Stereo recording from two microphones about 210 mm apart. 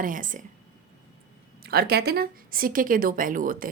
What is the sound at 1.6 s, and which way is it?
Speech, 50° right (ahead or behind).